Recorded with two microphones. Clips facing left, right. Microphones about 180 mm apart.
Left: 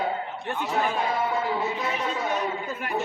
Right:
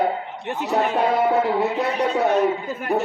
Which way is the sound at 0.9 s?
70° right (ahead or behind).